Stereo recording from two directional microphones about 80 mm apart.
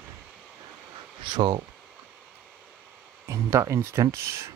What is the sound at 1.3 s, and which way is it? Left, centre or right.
Speech, right.